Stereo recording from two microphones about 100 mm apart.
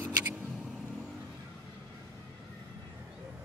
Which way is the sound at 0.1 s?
15° right (ahead or behind).